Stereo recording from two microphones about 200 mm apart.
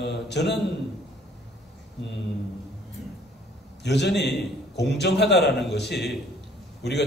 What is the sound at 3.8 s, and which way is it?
A man's voice, 60° left (ahead or behind).